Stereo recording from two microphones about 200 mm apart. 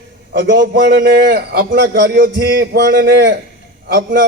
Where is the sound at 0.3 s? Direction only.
60° right (ahead or behind).